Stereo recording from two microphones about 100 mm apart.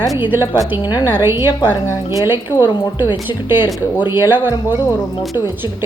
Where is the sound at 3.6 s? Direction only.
45° left (ahead or behind).